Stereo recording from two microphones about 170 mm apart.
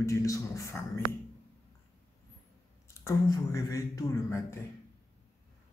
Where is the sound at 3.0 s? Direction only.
20° left (ahead or behind).